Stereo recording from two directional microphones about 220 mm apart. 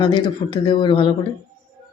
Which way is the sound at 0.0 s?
20° left (ahead or behind).